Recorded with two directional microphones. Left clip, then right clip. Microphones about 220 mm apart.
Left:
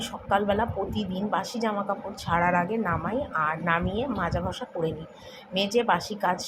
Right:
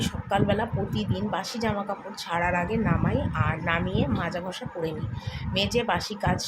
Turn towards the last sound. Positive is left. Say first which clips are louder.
# left 2 dB
turn(degrees=0)  # may be behind; listen again after turning